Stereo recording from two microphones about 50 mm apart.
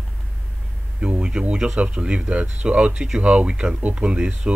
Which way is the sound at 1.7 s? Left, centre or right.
Centre.